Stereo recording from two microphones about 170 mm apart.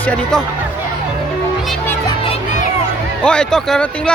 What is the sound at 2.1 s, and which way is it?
Music, 30° left (ahead or behind).